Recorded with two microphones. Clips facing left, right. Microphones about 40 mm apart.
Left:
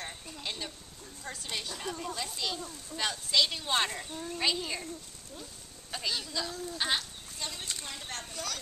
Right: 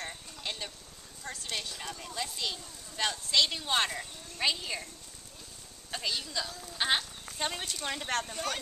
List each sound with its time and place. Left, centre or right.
0.0 s a sound: centre
1.2 s speech: centre
5.9 s speech: centre
7.3 s speech: right